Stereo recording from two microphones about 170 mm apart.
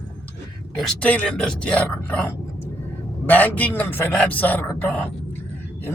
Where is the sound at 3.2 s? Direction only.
10° left (ahead or behind).